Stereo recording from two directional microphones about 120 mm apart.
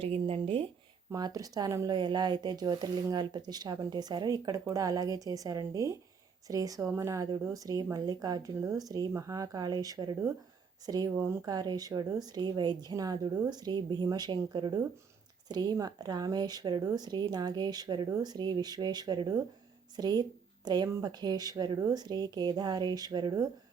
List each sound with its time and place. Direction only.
0.0 s speech: 50° right (ahead or behind)
1.1 s speech: 30° right (ahead or behind)
11.1 s speech: 20° right (ahead or behind)
11.4 s speech: 35° right (ahead or behind)